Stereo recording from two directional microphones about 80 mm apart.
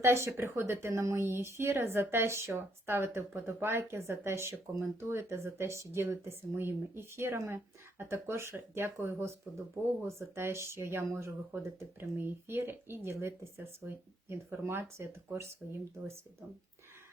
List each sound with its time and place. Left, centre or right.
0.0 s speech: right